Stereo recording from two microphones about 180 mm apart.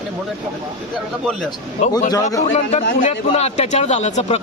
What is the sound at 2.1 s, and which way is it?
Speech, 20° left (ahead or behind).